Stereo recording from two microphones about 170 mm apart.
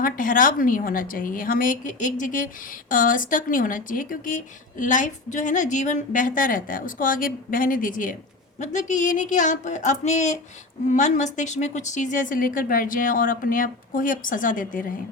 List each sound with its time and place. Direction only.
0.0 s speech: 55° left (ahead or behind)